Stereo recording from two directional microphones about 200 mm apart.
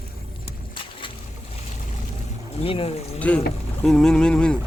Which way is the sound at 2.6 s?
30° left (ahead or behind).